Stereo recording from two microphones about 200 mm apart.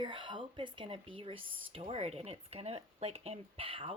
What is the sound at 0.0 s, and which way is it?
Speech, 25° right (ahead or behind).